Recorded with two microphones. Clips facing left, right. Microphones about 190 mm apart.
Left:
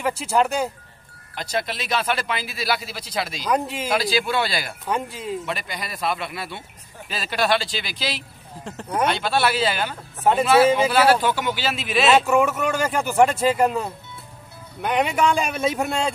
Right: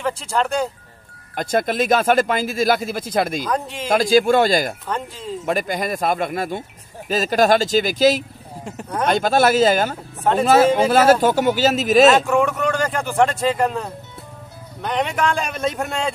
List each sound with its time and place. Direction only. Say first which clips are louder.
0.0 s speech: left 1 dB; 5° left (ahead or behind)
1.3 s a man's voice: right 7 dB; 50° right (ahead or behind)
3.4 s speech: left 1 dB; 10° left (ahead or behind)
3.9 s a man's voice: right 8 dB; 45° right (ahead or behind)
4.8 s speech: left 1 dB; 10° left (ahead or behind)
5.4 s a man's voice: right 8 dB; 45° right (ahead or behind)
12.3 s speech: right 1 dB; 5° left (ahead or behind)